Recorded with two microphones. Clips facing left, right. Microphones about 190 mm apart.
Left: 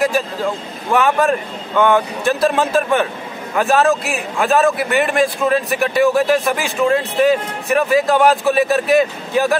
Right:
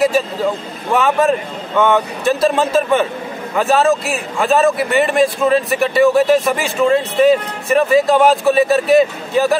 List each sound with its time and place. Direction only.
0.9 s speech: centre (ahead or behind)